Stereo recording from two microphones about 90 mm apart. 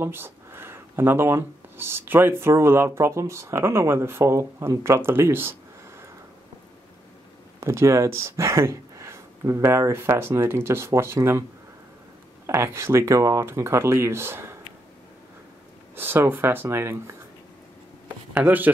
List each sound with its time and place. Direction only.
0.0 s speech: 25° right (ahead or behind)
7.6 s speech: 30° right (ahead or behind)
12.4 s speech: 30° right (ahead or behind)
16.0 s speech: 25° right (ahead or behind)
18.3 s speech: 20° right (ahead or behind)